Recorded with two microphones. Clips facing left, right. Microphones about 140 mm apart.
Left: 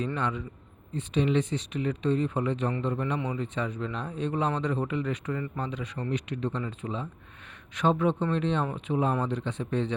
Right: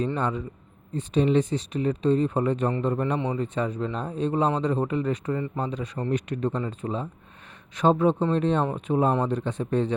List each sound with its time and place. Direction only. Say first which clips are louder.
0.0 s a man's voice: right 4 dB; 35° right (ahead or behind)
3.2 s a man's voice: right 4 dB; 30° right (ahead or behind)
3.4 s a man's voice: right 4 dB; 40° right (ahead or behind)